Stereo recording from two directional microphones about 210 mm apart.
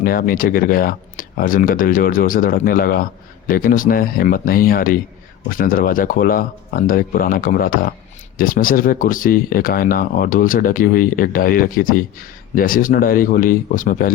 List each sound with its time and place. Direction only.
0.0 s speech: 45° left (ahead or behind)